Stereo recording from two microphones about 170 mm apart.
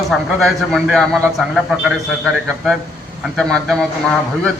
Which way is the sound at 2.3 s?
Centre (ahead or behind).